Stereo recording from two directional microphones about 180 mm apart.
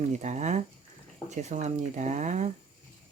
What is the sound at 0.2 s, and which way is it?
Speech, 40° right (ahead or behind).